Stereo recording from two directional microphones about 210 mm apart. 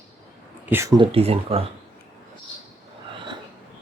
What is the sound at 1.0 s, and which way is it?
Speech, 25° right (ahead or behind).